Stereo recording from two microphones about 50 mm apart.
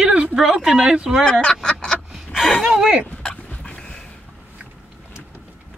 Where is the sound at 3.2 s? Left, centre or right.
Centre.